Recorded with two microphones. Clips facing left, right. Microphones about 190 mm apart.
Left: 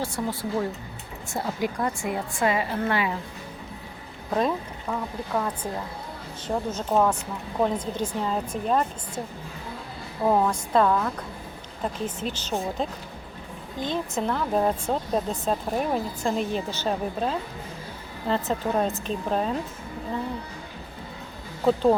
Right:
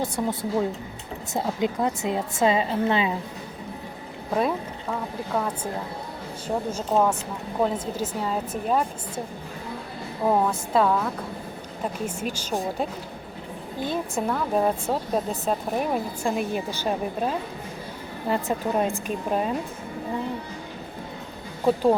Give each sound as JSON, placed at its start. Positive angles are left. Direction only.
{"t": 0.0, "sound": "a woman's voice", "side_deg": -20}
{"t": 4.4, "sound": "speech", "side_deg": -5}
{"t": 6.7, "sound": "speech", "side_deg": -10}
{"t": 10.2, "sound": "speech", "side_deg": -5}
{"t": 21.7, "sound": "speech", "side_deg": -10}